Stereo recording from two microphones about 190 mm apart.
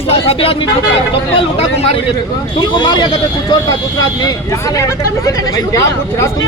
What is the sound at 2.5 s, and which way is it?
Speech, 25° left (ahead or behind).